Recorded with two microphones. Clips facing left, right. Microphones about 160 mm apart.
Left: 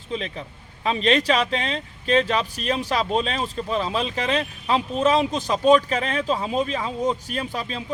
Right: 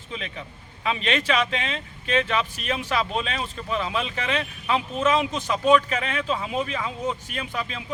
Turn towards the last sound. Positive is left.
turn(degrees=35)  # may be behind; listen again after turning